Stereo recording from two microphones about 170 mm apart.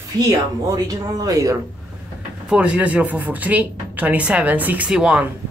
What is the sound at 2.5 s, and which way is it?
Speech, 5° right (ahead or behind).